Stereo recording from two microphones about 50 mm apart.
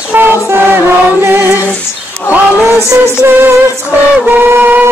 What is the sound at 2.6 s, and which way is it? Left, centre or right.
Music, right.